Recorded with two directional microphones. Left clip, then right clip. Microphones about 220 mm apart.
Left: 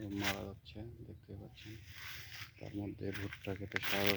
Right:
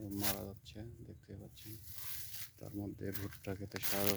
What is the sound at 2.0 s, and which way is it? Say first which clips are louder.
Zipper: left 3 dB; 15° right (ahead or behind).